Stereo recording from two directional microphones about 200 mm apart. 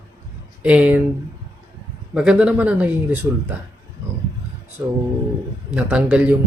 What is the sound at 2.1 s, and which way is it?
Speech, 5° right (ahead or behind).